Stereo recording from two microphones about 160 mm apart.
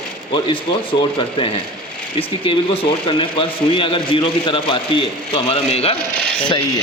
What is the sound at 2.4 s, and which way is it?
Speech, 35° left (ahead or behind).